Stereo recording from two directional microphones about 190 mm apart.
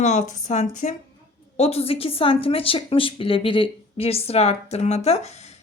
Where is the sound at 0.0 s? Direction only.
40° left (ahead or behind).